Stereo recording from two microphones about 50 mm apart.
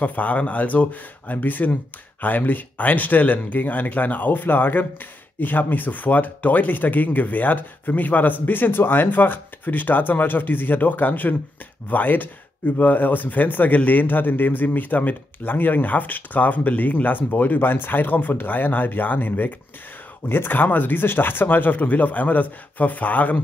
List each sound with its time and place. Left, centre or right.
0.0 s speech: left